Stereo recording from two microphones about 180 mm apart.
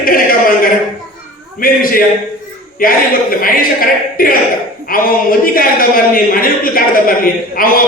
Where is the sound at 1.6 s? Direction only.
50° left (ahead or behind).